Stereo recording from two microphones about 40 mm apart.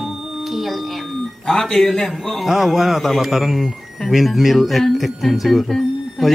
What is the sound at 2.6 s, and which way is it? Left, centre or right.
Speech, centre.